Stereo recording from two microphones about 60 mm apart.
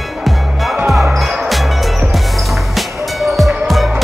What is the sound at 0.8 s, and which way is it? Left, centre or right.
Basketball bounce, centre.